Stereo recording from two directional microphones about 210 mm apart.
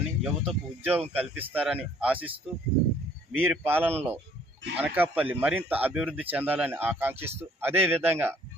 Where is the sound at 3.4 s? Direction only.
10° right (ahead or behind).